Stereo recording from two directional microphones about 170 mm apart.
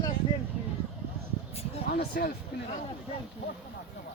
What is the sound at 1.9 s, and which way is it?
Speech, 65° left (ahead or behind).